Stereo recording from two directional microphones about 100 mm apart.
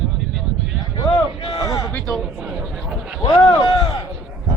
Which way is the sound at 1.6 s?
35° left (ahead or behind).